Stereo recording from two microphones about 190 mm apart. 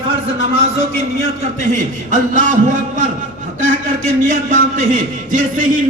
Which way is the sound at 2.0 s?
40° right (ahead or behind).